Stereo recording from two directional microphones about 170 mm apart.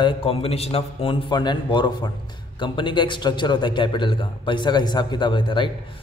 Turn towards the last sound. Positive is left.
turn(degrees=30)  # may be behind; listen again after turning